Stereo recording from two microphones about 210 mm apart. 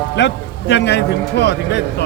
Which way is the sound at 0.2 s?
55° left (ahead or behind).